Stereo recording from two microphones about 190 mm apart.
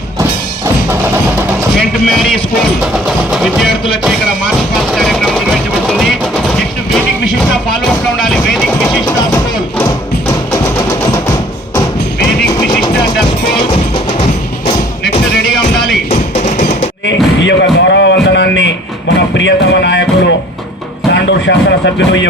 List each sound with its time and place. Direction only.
1.8 s speech: centre (ahead or behind)
4.9 s a sound: centre (ahead or behind)
16.0 s music: 40° left (ahead or behind)
17.4 s a sound: 65° left (ahead or behind)
19.1 s music: 65° left (ahead or behind)
21.1 s speech: 70° left (ahead or behind)